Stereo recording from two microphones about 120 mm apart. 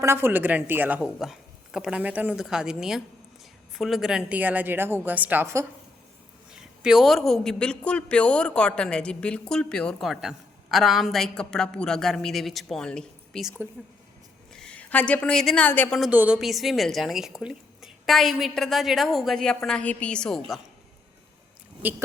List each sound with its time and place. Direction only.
0.0 s a woman's voice: 20° right (ahead or behind)
1.0 s a man's voice: 5° right (ahead or behind)
6.5 s a man's voice: 5° right (ahead or behind)
14.5 s a woman's voice: 5° left (ahead or behind)
16.0 s a woman's voice: 10° right (ahead or behind); by 20.6 s 5° left (ahead or behind)